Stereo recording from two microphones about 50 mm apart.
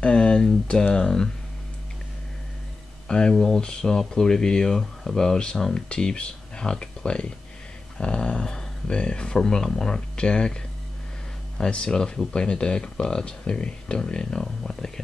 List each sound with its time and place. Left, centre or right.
0.0 s speech: centre
3.1 s speech: centre
11.7 s speech: centre